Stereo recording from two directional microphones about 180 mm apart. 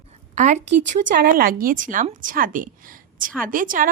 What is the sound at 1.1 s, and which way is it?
A woman's voice, 60° right (ahead or behind).